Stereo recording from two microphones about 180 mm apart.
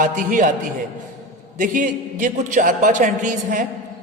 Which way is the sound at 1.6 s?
45° right (ahead or behind).